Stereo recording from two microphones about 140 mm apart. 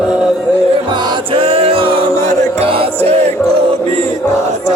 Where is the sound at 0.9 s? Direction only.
35° right (ahead or behind).